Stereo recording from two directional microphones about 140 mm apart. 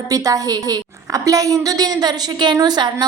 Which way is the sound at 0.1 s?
25° right (ahead or behind).